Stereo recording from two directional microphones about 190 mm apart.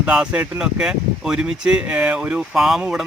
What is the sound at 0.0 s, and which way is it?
Speech, 5° right (ahead or behind).